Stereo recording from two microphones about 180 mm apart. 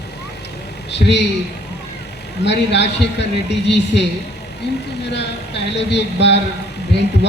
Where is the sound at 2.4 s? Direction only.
75° left (ahead or behind).